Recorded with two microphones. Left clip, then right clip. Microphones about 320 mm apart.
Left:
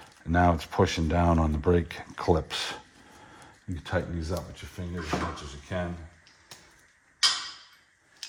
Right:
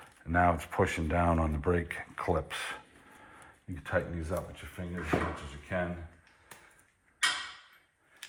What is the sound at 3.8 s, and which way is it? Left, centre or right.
Speech, left.